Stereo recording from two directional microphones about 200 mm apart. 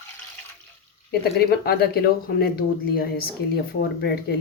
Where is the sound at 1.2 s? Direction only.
50° left (ahead or behind).